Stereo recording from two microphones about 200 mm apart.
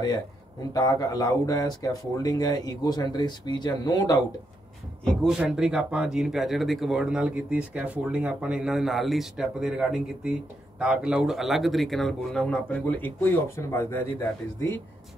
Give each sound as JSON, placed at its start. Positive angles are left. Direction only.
{"t": 0.0, "sound": "speech", "side_deg": 20}
{"t": 5.0, "sound": "speech", "side_deg": 0}